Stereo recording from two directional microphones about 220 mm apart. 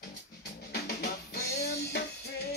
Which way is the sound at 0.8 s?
50° left (ahead or behind).